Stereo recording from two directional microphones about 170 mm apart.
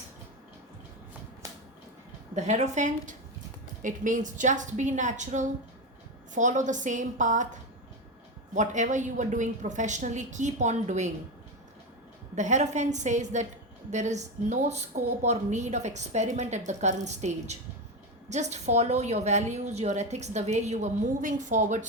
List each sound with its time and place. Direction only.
2.3 s a woman's voice: 45° right (ahead or behind)
12.4 s a woman's voice: 45° right (ahead or behind)